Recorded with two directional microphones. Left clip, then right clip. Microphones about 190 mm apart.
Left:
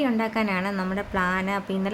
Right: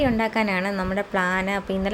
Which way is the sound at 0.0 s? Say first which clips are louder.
Right 3 dB; 15° right (ahead or behind).